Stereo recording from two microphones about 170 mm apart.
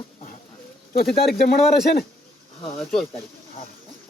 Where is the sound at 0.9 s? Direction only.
60° left (ahead or behind).